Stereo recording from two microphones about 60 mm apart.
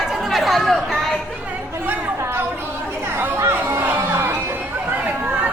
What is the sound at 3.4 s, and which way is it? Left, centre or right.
Music, right.